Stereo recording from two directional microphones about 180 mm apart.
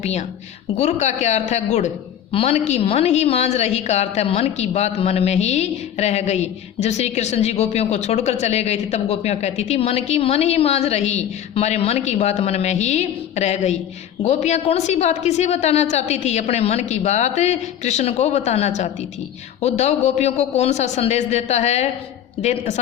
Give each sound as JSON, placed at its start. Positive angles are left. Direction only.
{"t": 0.0, "sound": "a woman's voice", "side_deg": 40}